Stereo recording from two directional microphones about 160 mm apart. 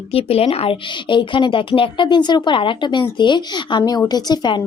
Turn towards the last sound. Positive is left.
turn(degrees=25)  # may be behind; listen again after turning